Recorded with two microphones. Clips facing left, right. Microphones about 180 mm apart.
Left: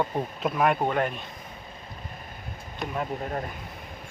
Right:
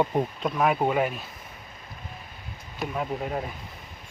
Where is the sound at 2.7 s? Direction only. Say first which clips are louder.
Right 1 dB; centre (ahead or behind).